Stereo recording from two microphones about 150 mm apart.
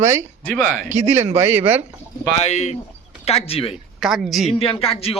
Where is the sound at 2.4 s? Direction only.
50° left (ahead or behind).